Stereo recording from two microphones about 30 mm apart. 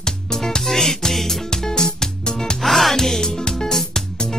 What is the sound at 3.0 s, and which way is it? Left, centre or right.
Music, left.